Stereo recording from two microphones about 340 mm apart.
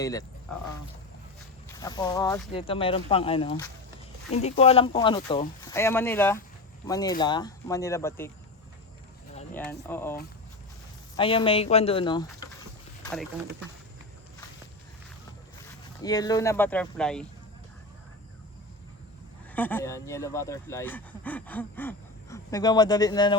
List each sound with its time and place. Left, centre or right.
0.0 s speech: centre
1.6 s speech: centre
9.5 s speech: centre
11.2 s speech: centre
15.6 s speech: centre
19.5 s speech: centre